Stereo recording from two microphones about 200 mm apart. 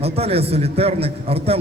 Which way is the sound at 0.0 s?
30° right (ahead or behind).